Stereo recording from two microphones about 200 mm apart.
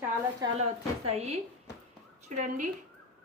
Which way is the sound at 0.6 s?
30° right (ahead or behind).